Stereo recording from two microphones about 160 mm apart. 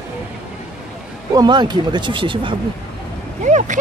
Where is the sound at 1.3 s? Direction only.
25° right (ahead or behind).